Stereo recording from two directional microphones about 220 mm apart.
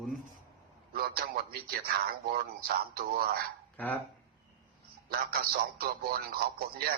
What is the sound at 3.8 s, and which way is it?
Speech, 5° left (ahead or behind).